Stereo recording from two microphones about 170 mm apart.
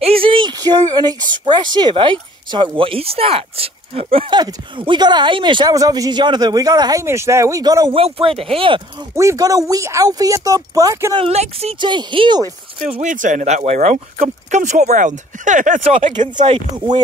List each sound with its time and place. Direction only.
0.0 s a sound: 35° right (ahead or behind)
0.9 s speech: 25° right (ahead or behind)
9.1 s speech: 15° right (ahead or behind)
11.1 s speech: 35° right (ahead or behind)
12.8 s speech: 45° right (ahead or behind)
16.0 s speech: 30° right (ahead or behind)